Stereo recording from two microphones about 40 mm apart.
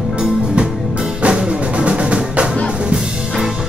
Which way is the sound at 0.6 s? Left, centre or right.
Right.